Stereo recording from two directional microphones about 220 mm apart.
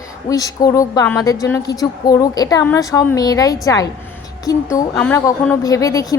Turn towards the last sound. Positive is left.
turn(degrees=15)  # may be behind; listen again after turning